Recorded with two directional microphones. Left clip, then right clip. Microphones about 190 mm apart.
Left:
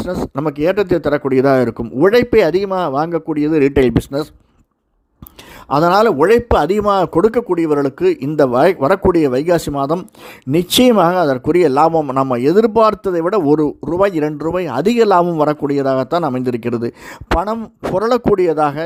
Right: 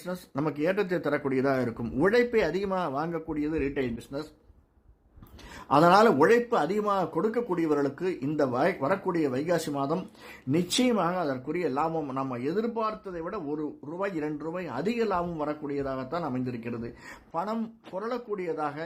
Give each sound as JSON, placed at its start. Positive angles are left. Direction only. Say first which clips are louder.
{"t": 0.0, "sound": "a man's voice", "louder": "left 13 dB", "side_deg": 35}
{"t": 5.6, "sound": "speech", "louder": "left 8 dB", "side_deg": 40}